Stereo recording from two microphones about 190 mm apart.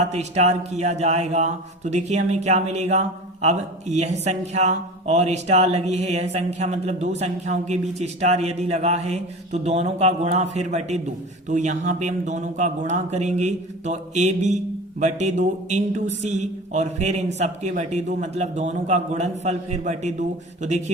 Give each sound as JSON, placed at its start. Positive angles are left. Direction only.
{"t": 0.0, "sound": "speech", "side_deg": -35}